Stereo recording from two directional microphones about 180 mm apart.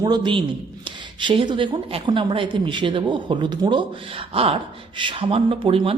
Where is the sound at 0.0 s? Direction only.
25° right (ahead or behind).